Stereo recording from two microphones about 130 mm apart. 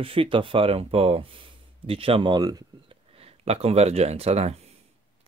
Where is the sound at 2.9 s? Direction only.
50° right (ahead or behind).